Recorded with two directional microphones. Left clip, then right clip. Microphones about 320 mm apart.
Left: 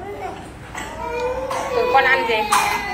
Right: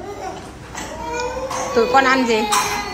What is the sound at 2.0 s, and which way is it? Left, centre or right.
Speech, centre.